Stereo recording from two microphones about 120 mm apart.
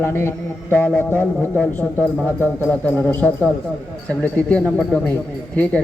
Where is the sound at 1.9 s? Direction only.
20° right (ahead or behind).